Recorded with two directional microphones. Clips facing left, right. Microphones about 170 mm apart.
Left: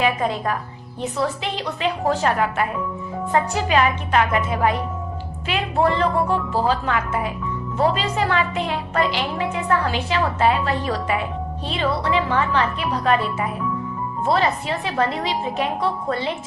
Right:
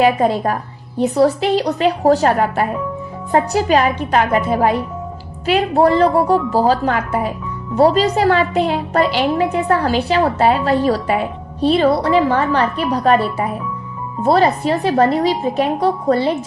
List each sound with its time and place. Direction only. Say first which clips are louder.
0.0 s a woman's voice: right 7 dB; 35° right (ahead or behind)